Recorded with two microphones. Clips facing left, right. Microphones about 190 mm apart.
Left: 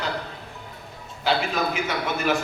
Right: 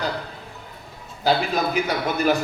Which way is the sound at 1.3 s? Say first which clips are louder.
Right 3 dB; 35° right (ahead or behind).